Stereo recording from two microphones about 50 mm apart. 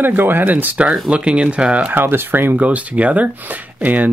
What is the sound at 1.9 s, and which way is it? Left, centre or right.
Speech, right.